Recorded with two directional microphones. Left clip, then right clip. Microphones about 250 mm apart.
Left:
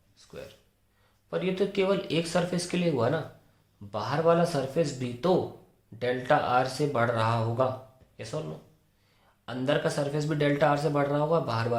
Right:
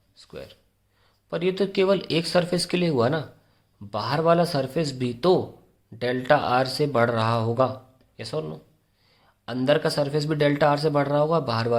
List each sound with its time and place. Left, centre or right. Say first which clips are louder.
0.2 s speech: right 4 dB; right